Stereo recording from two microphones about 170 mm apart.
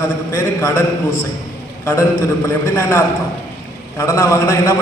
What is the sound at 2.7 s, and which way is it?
Speech, 15° left (ahead or behind).